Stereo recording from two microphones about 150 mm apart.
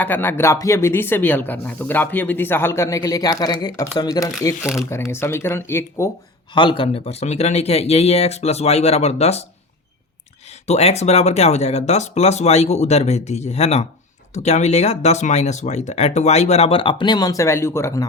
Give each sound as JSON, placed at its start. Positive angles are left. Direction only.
{"t": 0.0, "sound": "speech", "side_deg": 15}
{"t": 6.5, "sound": "speech", "side_deg": 30}
{"t": 10.7, "sound": "speech", "side_deg": 45}